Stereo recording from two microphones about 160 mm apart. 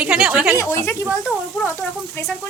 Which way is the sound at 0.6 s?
15° left (ahead or behind).